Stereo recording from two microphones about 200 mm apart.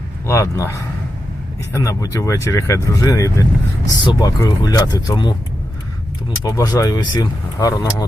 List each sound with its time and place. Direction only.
0.3 s speech: 15° left (ahead or behind)
6.4 s speech: 15° left (ahead or behind)